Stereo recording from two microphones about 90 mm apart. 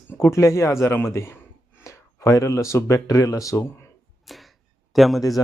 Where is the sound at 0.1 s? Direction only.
30° left (ahead or behind).